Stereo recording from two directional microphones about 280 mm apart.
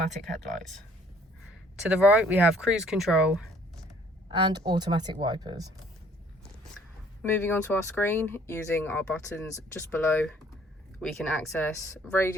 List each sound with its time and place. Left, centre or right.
1.9 s speech: centre
4.3 s speech: centre
7.2 s speech: centre